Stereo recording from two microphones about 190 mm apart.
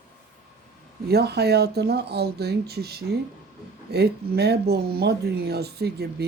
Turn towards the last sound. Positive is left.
turn(degrees=-60)  # may be behind; listen again after turning